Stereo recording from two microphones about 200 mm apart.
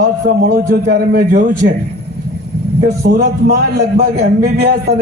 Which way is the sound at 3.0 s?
50° right (ahead or behind).